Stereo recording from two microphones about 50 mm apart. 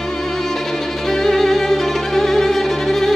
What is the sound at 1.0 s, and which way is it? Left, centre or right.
Violin, centre.